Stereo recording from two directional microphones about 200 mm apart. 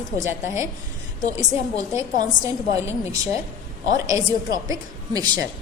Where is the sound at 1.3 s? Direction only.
15° right (ahead or behind).